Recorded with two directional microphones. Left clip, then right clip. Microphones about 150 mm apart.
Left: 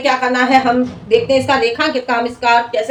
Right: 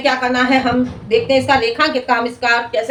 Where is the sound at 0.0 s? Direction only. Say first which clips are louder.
Left 1 dB; 20° left (ahead or behind).